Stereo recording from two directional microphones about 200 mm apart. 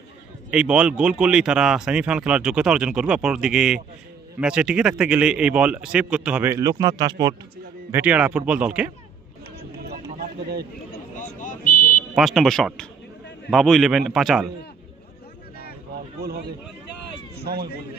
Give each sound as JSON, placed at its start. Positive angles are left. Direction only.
{"t": 0.5, "sound": "speech", "side_deg": -5}
{"t": 7.9, "sound": "speech", "side_deg": -5}
{"t": 9.6, "sound": "a sound", "side_deg": -50}
{"t": 12.1, "sound": "speech", "side_deg": 0}
{"t": 16.2, "sound": "speech", "side_deg": -50}